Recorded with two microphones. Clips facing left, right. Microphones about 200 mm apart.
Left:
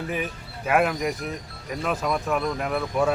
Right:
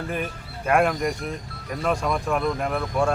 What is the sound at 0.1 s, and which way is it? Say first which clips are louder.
Speech: even; 5° left (ahead or behind).